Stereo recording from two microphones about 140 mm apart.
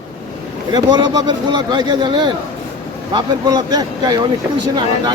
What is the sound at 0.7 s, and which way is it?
Speech, 35° right (ahead or behind).